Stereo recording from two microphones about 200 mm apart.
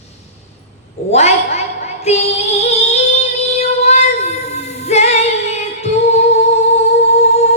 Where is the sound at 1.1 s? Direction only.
35° left (ahead or behind).